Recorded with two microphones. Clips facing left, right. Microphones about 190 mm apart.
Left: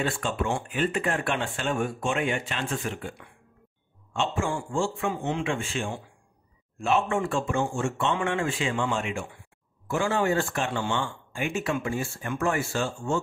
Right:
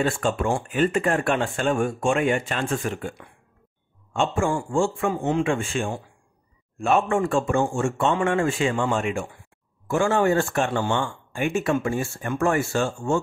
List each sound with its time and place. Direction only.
0.0 s speech: 45° right (ahead or behind)